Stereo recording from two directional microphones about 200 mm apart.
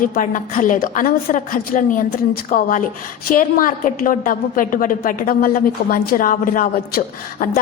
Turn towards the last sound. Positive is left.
turn(degrees=45)  # may be behind; listen again after turning